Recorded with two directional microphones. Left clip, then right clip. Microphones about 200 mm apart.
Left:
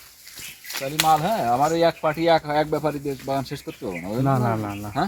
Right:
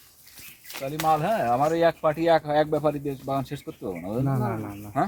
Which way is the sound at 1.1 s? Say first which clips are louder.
Left 1 dB; 5° right (ahead or behind).